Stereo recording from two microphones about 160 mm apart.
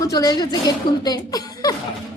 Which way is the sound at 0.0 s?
20° left (ahead or behind).